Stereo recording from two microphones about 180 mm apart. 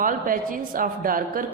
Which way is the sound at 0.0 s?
50° right (ahead or behind).